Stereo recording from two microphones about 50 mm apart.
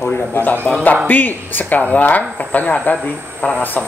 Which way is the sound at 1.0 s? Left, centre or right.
Left.